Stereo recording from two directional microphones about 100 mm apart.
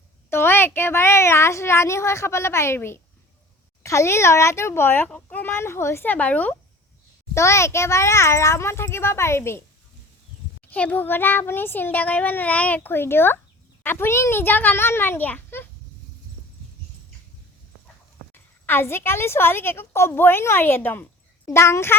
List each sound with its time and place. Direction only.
0.3 s a woman's voice: 25° left (ahead or behind)
7.3 s a woman's voice: 30° left (ahead or behind)
10.7 s a woman's voice: 15° left (ahead or behind)
18.3 s a woman's voice: 20° left (ahead or behind)